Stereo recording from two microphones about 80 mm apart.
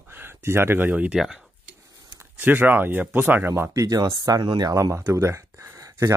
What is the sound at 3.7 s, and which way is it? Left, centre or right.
Speech, right.